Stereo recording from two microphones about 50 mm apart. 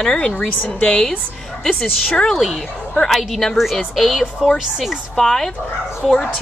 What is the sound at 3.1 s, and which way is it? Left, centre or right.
A woman's voice, centre.